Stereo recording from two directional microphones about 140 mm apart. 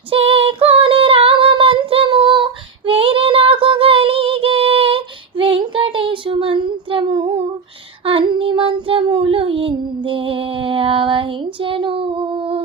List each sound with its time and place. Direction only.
0.1 s female singing: 45° right (ahead or behind)
8.0 s child singing: 40° right (ahead or behind)